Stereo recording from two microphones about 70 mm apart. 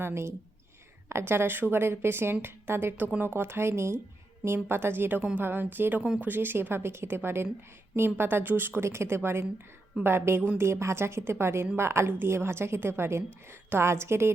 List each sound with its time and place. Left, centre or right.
0.0 s a woman's voice: right